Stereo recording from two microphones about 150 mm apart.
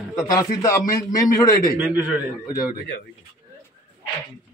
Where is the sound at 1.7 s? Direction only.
10° right (ahead or behind).